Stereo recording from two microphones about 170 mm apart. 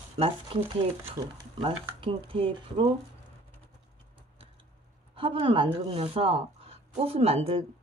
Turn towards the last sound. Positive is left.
turn(degrees=-35)  # may be behind; listen again after turning